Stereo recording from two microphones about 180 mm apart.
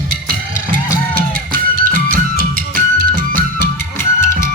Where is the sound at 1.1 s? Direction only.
50° right (ahead or behind).